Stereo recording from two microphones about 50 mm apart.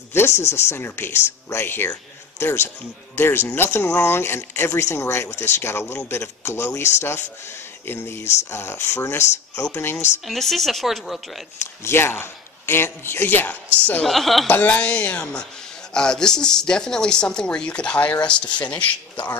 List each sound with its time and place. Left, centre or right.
0.1 s speech: left
4.8 s speech: left
6.4 s speech: left
6.7 s speech: left
7.8 s speech: left
10.2 s speech: centre
11.8 s speech: left
13.5 s a woman's voice: left
14.0 s speech: centre
14.7 s speech: left